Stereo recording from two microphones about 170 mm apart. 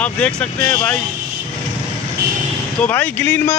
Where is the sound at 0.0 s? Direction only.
5° left (ahead or behind).